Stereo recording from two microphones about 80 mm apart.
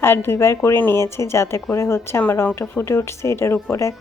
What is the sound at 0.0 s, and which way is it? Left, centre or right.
A woman's voice, left.